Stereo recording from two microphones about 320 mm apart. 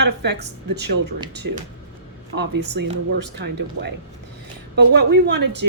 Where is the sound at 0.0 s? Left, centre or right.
Right.